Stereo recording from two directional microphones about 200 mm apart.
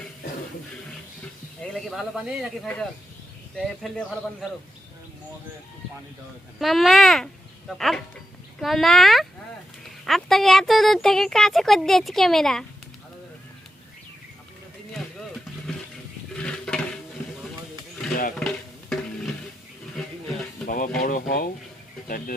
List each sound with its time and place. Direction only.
1.7 s speech: centre (ahead or behind)
6.6 s speech: centre (ahead or behind)
14.9 s vehicle: centre (ahead or behind)
16.3 s dishes: 5° left (ahead or behind)
18.3 s music: 5° left (ahead or behind)
20.7 s a sound: 45° left (ahead or behind)
21.0 s speech: 45° left (ahead or behind)